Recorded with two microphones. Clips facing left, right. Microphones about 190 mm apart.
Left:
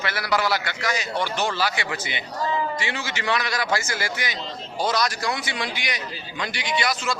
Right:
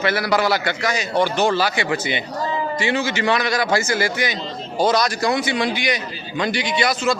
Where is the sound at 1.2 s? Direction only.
50° right (ahead or behind).